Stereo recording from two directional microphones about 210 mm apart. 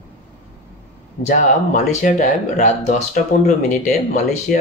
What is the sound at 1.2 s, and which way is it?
Speech, 35° left (ahead or behind).